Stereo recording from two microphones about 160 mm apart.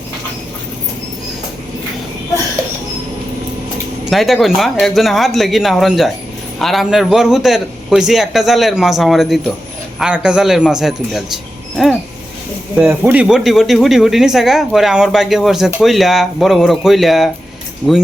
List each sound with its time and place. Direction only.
4.1 s speech: centre (ahead or behind)
11.8 s dog: centre (ahead or behind)
12.7 s speech: 10° right (ahead or behind)